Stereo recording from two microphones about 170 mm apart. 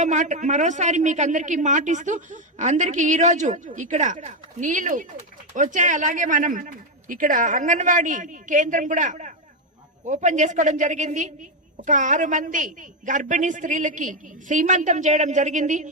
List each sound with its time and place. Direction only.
0.0 s speech: 45° right (ahead or behind)